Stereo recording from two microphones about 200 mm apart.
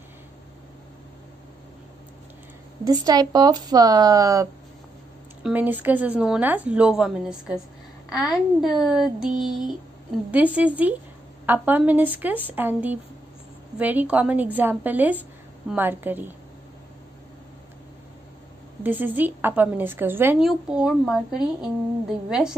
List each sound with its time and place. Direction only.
2.8 s speech: 20° right (ahead or behind); by 9.3 s centre (ahead or behind)
10.3 s speech: 5° right (ahead or behind)
18.8 s speech: 10° right (ahead or behind)